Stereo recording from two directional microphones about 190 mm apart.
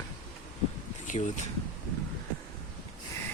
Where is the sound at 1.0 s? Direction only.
40° left (ahead or behind).